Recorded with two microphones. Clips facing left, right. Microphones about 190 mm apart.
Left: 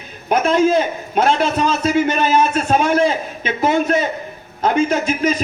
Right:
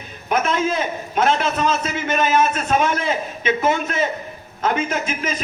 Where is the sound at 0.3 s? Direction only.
35° left (ahead or behind).